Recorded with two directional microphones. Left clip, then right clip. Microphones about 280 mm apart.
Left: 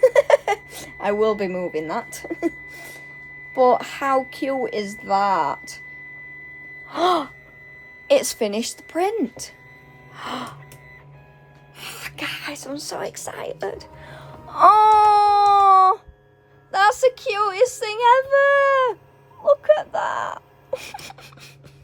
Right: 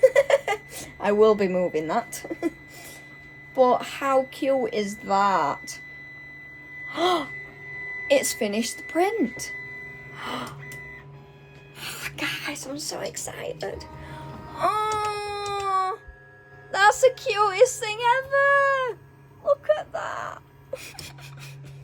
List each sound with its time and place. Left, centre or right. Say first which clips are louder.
0.0 s a sound: left 3 dB; centre
3.5 s a woman's voice: left 3 dB; centre
6.8 s gasp: left 4 dB; centre
8.0 s a woman's voice: left 4 dB; centre
10.2 s gasp: left 3 dB; centre
11.8 s whispering: even; centre
16.7 s a woman's voice: left 1 dB; centre; by 21.2 s left